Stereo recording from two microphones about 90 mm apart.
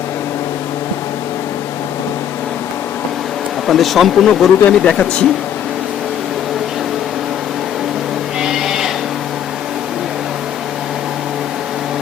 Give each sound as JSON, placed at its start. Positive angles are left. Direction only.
{"t": 3.7, "sound": "speech", "side_deg": 0}
{"t": 8.4, "sound": "sheep", "side_deg": -5}